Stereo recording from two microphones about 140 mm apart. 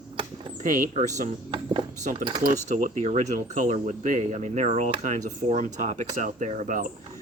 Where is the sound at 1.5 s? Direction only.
35° right (ahead or behind).